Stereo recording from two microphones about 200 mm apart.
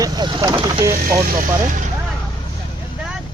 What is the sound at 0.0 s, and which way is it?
Vehicle, 20° right (ahead or behind).